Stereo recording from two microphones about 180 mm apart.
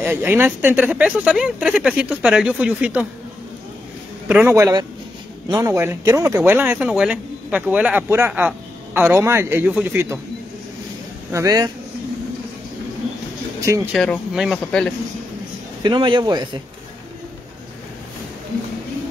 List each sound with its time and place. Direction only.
0.0 s speech: 10° right (ahead or behind)
4.3 s speech: 10° right (ahead or behind)
11.3 s speech: 20° right (ahead or behind)
13.9 s speech: centre (ahead or behind)
15.8 s speech: 25° right (ahead or behind)